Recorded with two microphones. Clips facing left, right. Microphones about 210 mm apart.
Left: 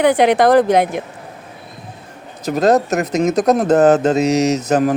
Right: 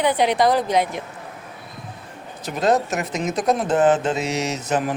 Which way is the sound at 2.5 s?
40° left (ahead or behind).